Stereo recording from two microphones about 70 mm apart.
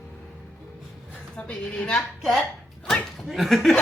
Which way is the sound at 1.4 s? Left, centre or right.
Centre.